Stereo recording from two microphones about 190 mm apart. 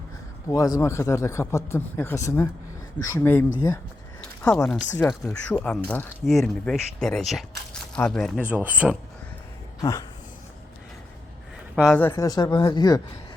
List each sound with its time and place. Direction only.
0.5 s a man's voice: 20° left (ahead or behind)
4.2 s a sound: 5° left (ahead or behind)
5.2 s speech: 5° left (ahead or behind)
8.4 s speech: 10° right (ahead or behind)
9.8 s a man's voice: 15° left (ahead or behind)
11.8 s speech: 5° left (ahead or behind); by 13.0 s 20° left (ahead or behind)